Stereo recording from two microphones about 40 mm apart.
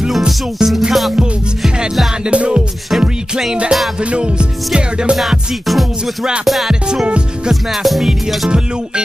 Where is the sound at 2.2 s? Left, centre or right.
Right.